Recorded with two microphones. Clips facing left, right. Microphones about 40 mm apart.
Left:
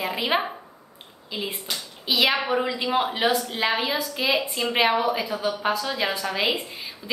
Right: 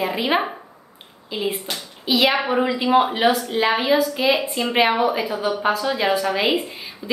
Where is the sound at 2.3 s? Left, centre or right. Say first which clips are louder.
Right 4 dB; centre.